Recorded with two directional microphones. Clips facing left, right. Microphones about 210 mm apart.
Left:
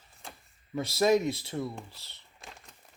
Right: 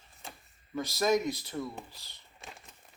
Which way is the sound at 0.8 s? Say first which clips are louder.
Left 3 dB; 30° left (ahead or behind).